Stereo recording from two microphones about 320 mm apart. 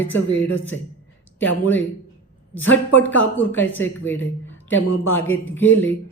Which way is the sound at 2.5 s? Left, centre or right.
Centre.